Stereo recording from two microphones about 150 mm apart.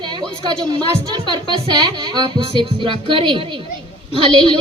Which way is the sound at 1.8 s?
30° right (ahead or behind).